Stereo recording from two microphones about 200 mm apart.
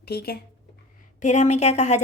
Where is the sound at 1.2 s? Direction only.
35° left (ahead or behind).